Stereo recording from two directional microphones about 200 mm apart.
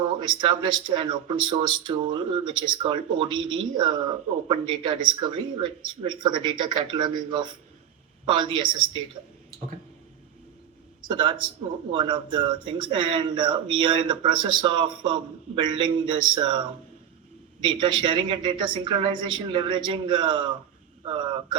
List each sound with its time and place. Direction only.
0.2 s speech: 25° right (ahead or behind)
11.0 s speech: 25° right (ahead or behind)
21.0 s a sound: 25° right (ahead or behind)